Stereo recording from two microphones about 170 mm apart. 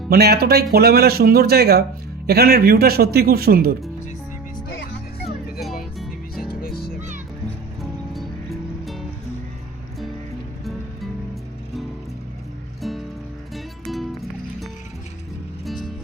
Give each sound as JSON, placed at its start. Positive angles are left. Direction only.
{"t": 0.1, "sound": "speech", "side_deg": -65}
{"t": 5.2, "sound": "music", "side_deg": 0}
{"t": 6.5, "sound": "music", "side_deg": 60}
{"t": 7.8, "sound": "music", "side_deg": 0}
{"t": 12.8, "sound": "music", "side_deg": 0}